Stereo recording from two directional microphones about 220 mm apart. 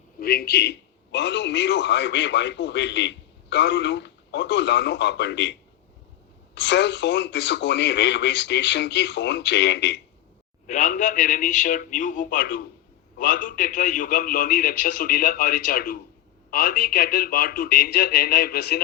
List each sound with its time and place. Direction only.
0.2 s a man's voice: 45° left (ahead or behind)
10.7 s a man's voice: 35° left (ahead or behind)